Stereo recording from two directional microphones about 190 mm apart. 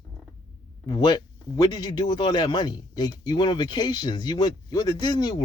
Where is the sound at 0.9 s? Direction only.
20° left (ahead or behind).